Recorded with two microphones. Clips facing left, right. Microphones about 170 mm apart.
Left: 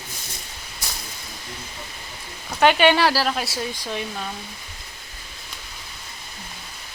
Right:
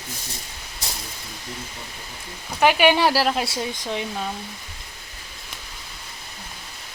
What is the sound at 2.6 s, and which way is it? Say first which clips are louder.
Speech: left 1 dB; 5° right (ahead or behind).